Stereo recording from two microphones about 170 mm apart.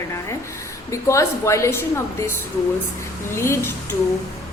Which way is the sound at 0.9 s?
15° left (ahead or behind).